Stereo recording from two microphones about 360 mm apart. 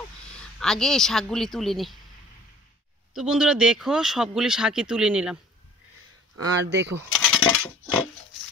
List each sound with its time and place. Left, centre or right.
0.3 s a woman's voice: centre
3.1 s speech: centre
6.3 s speech: right
7.1 s a sound: centre